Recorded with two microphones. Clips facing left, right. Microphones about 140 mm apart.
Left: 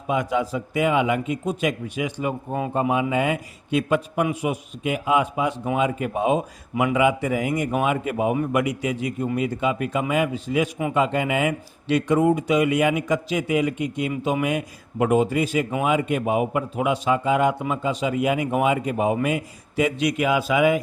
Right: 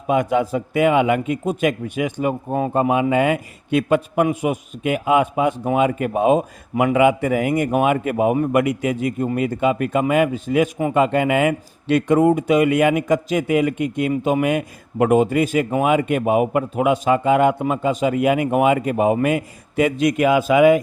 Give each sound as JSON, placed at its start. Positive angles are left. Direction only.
{"t": 0.1, "sound": "a man's voice", "side_deg": -55}